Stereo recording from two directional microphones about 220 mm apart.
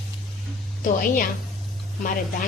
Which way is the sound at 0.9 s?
40° left (ahead or behind).